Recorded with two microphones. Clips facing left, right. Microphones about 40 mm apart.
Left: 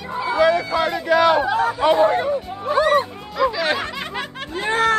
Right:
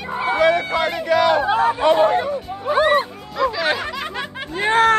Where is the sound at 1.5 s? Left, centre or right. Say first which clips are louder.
Right 2 dB; right.